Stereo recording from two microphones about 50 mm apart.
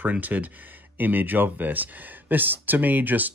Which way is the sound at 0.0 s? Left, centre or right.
Right.